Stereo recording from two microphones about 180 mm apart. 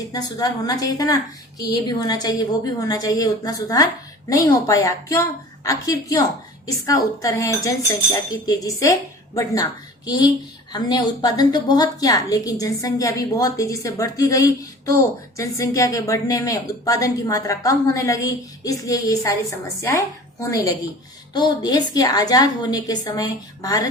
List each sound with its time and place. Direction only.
0.1 s a woman's voice: 20° left (ahead or behind)